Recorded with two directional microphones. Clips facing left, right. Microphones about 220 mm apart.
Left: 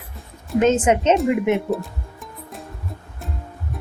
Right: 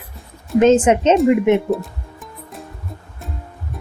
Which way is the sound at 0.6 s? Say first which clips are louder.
Right 4 dB; 30° right (ahead or behind).